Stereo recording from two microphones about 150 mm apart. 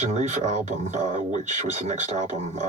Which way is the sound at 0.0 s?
50° right (ahead or behind).